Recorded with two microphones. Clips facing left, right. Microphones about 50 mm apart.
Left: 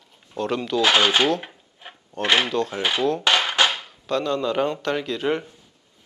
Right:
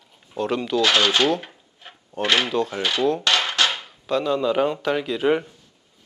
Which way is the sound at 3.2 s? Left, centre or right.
Centre.